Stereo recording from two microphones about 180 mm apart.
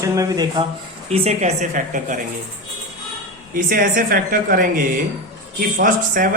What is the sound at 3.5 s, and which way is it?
A woman's voice, 50° right (ahead or behind).